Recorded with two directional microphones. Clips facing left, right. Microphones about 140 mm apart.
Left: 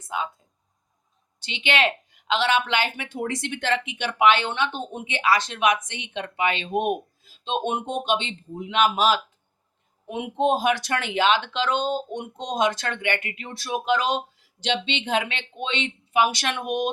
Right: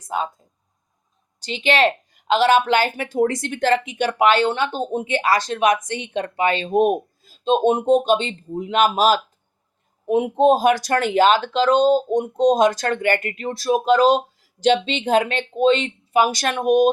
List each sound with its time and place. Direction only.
0.1 s speech: 40° right (ahead or behind)
1.4 s speech: 40° right (ahead or behind)